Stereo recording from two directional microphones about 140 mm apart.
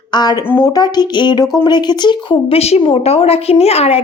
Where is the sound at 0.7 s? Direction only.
30° left (ahead or behind).